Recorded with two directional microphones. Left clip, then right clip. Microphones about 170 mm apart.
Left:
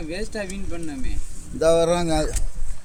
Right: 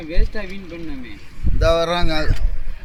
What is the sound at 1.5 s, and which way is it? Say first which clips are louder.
Speech: even; 90° left.